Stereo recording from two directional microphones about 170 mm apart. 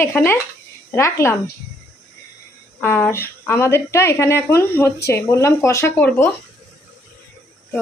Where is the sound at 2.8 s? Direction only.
15° left (ahead or behind).